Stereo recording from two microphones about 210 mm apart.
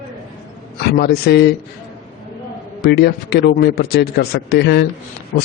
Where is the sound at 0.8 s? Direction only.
50° left (ahead or behind).